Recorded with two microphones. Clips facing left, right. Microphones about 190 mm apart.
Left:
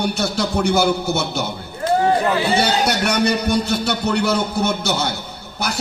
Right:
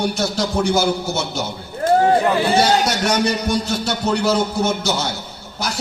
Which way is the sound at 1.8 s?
50° right (ahead or behind).